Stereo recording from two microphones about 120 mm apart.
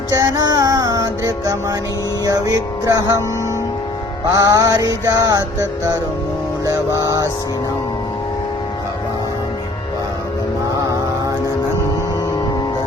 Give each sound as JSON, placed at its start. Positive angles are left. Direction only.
{"t": 0.1, "sound": "music", "side_deg": -30}
{"t": 4.3, "sound": "music", "side_deg": -30}
{"t": 6.7, "sound": "music", "side_deg": -30}